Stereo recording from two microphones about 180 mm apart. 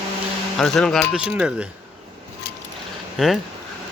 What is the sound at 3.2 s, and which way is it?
Speech, 5° right (ahead or behind).